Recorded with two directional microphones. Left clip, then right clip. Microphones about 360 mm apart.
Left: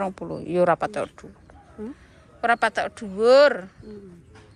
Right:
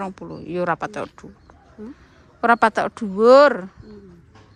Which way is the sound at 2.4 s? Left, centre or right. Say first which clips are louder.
Right 5 dB; centre.